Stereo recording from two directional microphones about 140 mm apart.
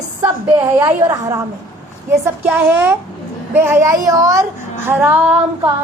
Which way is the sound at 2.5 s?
15° right (ahead or behind).